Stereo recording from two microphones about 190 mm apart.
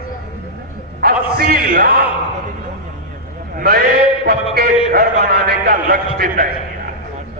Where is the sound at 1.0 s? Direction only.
50° right (ahead or behind).